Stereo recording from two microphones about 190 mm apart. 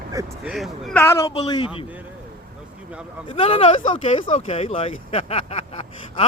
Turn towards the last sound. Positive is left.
turn(degrees=30)  # may be behind; listen again after turning